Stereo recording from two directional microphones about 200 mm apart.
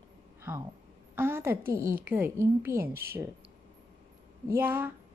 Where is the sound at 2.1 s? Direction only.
10° right (ahead or behind).